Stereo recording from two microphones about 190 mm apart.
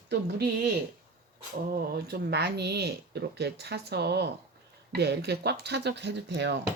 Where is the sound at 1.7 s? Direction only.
50° right (ahead or behind).